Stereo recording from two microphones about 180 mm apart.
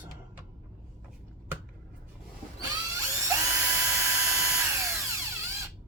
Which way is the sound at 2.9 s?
15° right (ahead or behind).